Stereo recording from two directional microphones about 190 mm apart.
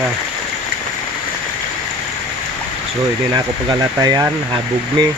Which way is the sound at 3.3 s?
20° right (ahead or behind).